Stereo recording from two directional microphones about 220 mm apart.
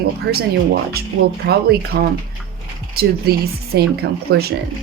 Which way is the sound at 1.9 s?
45° right (ahead or behind).